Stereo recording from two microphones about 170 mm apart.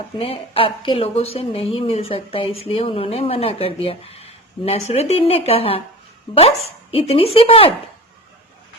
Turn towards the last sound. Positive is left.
turn(degrees=35)  # may be behind; listen again after turning